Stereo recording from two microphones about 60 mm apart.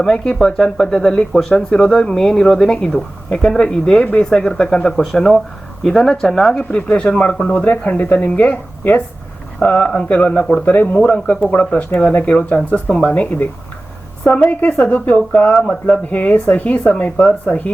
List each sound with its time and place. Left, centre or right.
0.0 s speech: centre
2.7 s speech: centre